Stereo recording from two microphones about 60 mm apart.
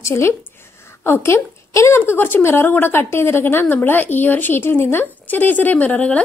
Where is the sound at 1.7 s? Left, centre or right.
Left.